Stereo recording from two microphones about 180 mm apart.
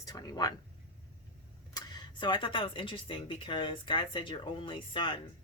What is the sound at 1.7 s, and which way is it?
Speech, 25° left (ahead or behind).